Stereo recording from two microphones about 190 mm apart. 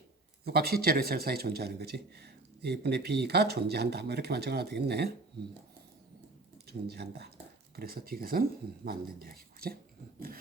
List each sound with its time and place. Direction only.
0.4 s speech: 55° right (ahead or behind)
6.7 s speech: 55° right (ahead or behind)